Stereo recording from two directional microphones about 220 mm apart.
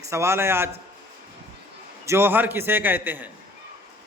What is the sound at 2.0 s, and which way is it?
A man's voice, 10° right (ahead or behind).